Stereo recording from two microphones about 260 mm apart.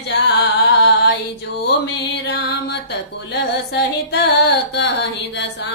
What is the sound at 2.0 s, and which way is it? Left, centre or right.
Music, left.